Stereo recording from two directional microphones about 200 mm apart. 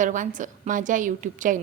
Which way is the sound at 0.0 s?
40° right (ahead or behind).